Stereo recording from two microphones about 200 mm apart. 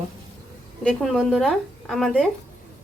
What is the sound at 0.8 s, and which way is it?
A woman's voice, centre (ahead or behind).